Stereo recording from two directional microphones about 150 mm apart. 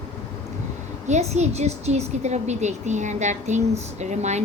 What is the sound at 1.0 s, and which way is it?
A woman's voice, 50° right (ahead or behind).